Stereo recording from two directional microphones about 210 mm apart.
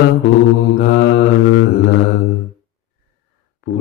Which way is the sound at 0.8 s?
65° left (ahead or behind).